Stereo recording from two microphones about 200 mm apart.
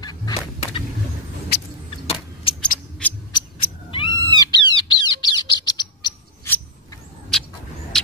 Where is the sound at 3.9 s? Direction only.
25° left (ahead or behind).